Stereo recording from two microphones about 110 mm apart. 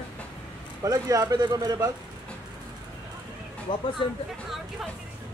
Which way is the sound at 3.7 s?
50° left (ahead or behind).